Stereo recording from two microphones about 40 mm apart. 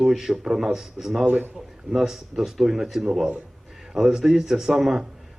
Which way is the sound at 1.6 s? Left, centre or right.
Centre.